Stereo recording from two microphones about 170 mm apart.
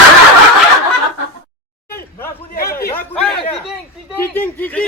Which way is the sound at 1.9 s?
10° left (ahead or behind).